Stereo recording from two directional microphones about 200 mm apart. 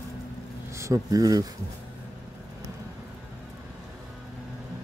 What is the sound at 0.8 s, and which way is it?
Speech, 15° right (ahead or behind).